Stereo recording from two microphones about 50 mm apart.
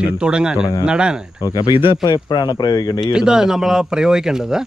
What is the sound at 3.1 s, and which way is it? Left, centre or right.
A man's voice, centre.